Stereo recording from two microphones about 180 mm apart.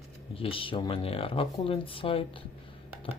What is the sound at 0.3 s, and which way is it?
Speech, 30° left (ahead or behind).